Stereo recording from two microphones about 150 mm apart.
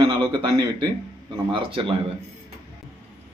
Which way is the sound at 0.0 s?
35° right (ahead or behind).